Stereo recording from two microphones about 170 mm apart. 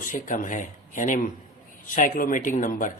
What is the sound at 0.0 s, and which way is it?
A man's voice, 50° left (ahead or behind).